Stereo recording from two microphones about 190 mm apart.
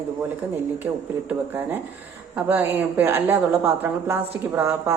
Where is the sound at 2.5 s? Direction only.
10° right (ahead or behind).